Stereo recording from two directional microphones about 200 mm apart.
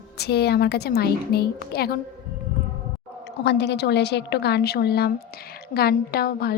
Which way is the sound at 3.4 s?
60° left (ahead or behind).